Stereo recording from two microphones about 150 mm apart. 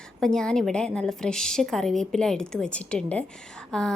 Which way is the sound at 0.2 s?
5° left (ahead or behind).